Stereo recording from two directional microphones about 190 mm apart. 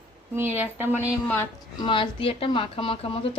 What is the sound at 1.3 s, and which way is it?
Speech, 10° left (ahead or behind).